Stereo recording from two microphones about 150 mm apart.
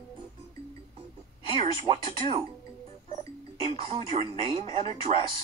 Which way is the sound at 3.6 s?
35° right (ahead or behind).